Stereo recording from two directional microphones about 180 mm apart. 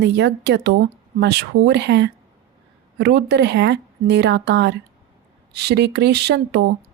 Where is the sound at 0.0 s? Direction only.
70° right (ahead or behind).